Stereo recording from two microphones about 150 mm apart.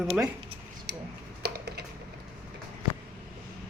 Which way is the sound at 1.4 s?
90° right.